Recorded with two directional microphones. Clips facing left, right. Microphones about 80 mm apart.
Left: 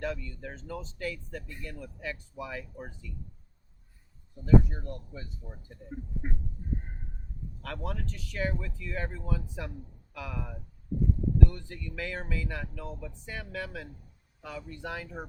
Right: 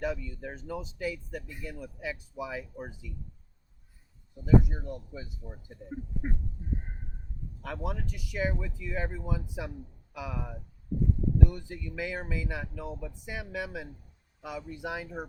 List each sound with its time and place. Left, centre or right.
0.0 s speech: centre
4.4 s speech: centre
7.6 s speech: centre